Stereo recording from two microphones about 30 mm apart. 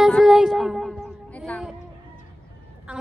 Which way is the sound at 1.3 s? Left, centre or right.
Left.